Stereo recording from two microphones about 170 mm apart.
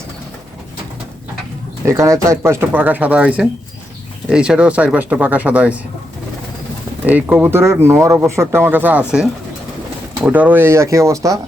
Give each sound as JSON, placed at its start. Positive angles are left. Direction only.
{"t": 1.8, "sound": "speech", "side_deg": -15}
{"t": 7.1, "sound": "speech", "side_deg": -10}